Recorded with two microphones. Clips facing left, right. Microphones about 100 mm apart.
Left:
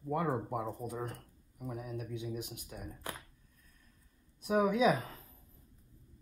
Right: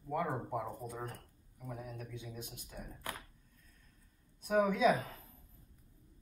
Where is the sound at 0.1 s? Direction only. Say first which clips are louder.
Left 2 dB; 55° left (ahead or behind).